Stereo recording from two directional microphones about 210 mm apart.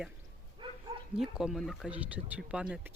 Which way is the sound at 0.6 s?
25° right (ahead or behind).